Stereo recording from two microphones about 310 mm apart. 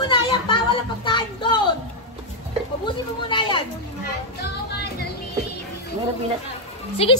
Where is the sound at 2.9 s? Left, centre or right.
Centre.